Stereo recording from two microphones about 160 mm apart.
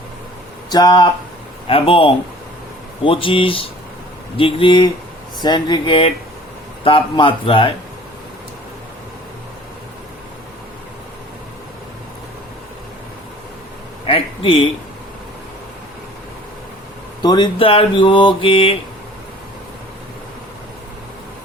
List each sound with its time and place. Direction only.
0.7 s speech: 25° left (ahead or behind)
14.1 s a man's voice: 35° left (ahead or behind)
17.2 s speech: 25° left (ahead or behind)